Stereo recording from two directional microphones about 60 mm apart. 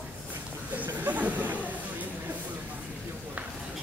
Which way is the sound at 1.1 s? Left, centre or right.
Right.